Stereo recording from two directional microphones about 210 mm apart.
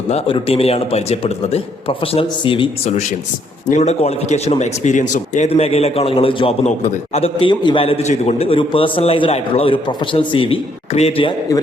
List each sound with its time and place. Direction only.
0.1 s a man's voice: 25° left (ahead or behind)